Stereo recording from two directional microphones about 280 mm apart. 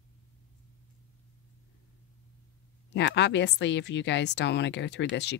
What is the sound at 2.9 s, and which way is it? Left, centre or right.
Speech, left.